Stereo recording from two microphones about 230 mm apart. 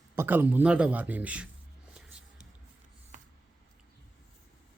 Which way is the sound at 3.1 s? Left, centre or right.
Right.